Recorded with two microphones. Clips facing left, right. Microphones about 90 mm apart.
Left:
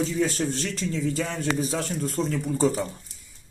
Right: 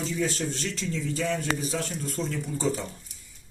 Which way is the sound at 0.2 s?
45° left (ahead or behind).